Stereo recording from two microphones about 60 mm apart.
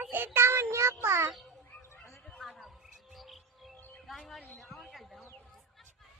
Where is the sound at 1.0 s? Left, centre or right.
Right.